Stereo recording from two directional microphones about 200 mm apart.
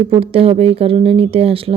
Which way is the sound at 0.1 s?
30° right (ahead or behind).